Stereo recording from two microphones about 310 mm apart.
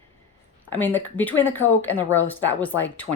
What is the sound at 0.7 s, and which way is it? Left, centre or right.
Speech, centre.